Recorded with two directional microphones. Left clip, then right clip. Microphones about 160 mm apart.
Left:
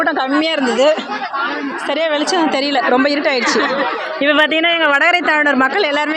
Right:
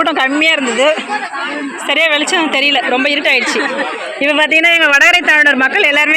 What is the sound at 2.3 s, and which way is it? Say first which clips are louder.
A woman's voice: right 3 dB; 5° left (ahead or behind).